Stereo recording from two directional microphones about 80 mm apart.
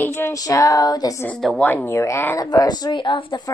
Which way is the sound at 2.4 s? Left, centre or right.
Left.